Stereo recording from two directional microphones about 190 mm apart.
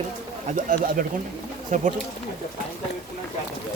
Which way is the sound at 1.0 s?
45° right (ahead or behind).